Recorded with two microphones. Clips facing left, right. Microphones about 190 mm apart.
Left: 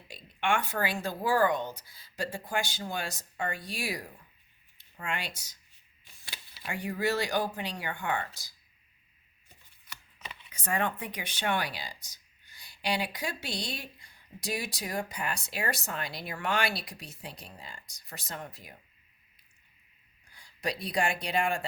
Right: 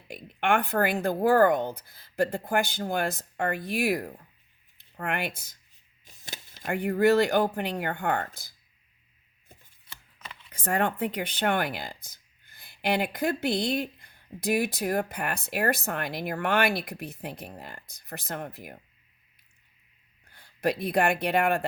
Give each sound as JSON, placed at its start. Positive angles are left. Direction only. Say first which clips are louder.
{"t": 0.3, "sound": "speech", "louder": "right 5 dB", "side_deg": -55}
{"t": 6.1, "sound": "speech", "louder": "right 5 dB", "side_deg": -45}
{"t": 9.9, "sound": "chopping", "louder": "even", "side_deg": -25}
{"t": 10.5, "sound": "speech", "louder": "right 4 dB", "side_deg": -55}
{"t": 20.3, "sound": "a sound", "louder": "right 7 dB", "side_deg": -60}
{"t": 20.8, "sound": "speech", "louder": "right 5 dB", "side_deg": -60}